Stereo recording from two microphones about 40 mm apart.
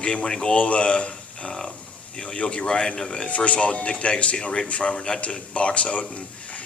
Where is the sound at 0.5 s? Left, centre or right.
Left.